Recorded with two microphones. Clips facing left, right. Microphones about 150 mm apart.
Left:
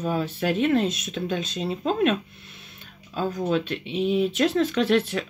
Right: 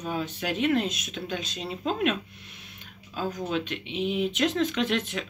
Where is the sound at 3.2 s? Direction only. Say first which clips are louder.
Left 5 dB; 40° left (ahead or behind).